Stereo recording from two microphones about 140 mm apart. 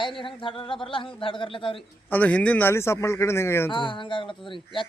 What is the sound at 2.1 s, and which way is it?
A man's voice, 10° left (ahead or behind).